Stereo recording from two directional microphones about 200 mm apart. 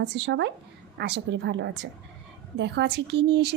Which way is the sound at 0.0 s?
60° right (ahead or behind).